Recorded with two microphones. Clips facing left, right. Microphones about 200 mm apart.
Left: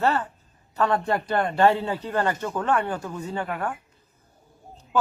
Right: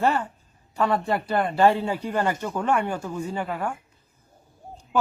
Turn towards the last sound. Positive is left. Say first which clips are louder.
# even
turn(degrees=-10)  # may be behind; listen again after turning